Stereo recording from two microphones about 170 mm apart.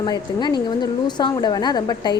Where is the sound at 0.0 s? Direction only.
25° left (ahead or behind).